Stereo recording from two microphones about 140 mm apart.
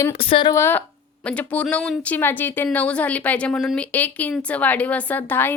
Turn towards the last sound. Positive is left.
turn(degrees=15)  # may be behind; listen again after turning